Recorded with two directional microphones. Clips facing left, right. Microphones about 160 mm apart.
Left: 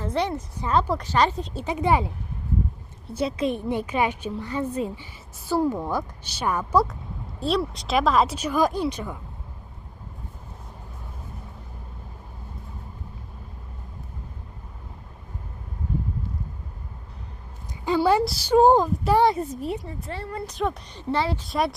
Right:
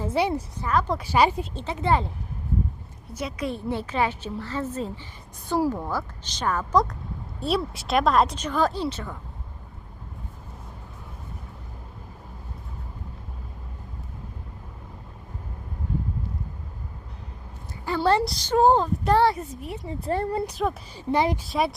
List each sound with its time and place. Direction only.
0.0 s a woman's voice: 10° right (ahead or behind)
0.6 s speech: 25° left (ahead or behind)
0.9 s speech: 10° right (ahead or behind)
1.5 s a woman's voice: 15° left (ahead or behind)
3.1 s a woman's voice: 30° left (ahead or behind); by 9.1 s 15° left (ahead or behind)
17.8 s a woman's voice: 15° left (ahead or behind)
19.4 s speech: 25° left (ahead or behind)
20.1 s a woman's voice: 45° right (ahead or behind)
20.5 s speech: 5° right (ahead or behind)
21.1 s speech: 15° right (ahead or behind)
21.4 s speech: centre (ahead or behind)